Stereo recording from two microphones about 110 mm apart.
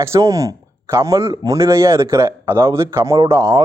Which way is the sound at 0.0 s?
25° right (ahead or behind).